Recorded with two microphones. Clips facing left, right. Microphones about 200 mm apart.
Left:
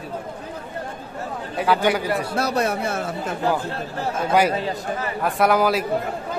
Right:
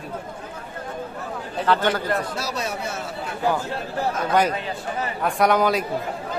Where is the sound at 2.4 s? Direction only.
55° left (ahead or behind).